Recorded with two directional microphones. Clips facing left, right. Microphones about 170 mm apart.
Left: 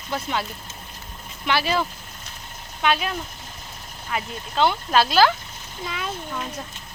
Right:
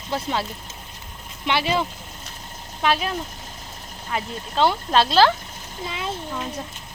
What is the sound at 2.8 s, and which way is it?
Speech, 35° right (ahead or behind).